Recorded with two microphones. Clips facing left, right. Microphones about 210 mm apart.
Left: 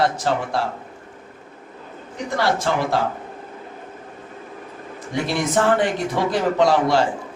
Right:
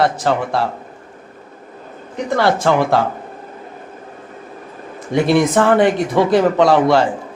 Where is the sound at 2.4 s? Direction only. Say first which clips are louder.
Right 6 dB; 65° right (ahead or behind).